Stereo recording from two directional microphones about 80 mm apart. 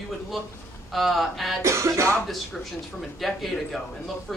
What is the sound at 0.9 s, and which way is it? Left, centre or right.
Speech, centre.